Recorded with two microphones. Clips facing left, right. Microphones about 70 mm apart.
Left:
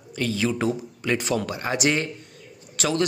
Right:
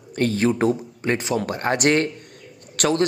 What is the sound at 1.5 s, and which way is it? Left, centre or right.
Speech, right.